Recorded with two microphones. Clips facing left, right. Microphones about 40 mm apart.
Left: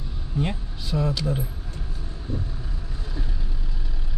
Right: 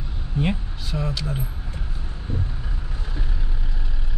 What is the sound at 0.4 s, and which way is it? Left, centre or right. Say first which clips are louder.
Speech: right 3 dB; right.